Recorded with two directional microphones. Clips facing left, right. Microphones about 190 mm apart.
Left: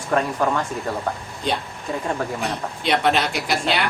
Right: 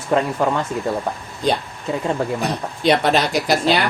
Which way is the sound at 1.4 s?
35° right (ahead or behind).